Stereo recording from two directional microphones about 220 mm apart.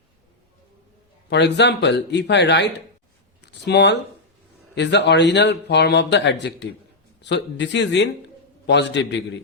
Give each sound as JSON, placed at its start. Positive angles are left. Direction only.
{"t": 1.3, "sound": "speech", "side_deg": 50}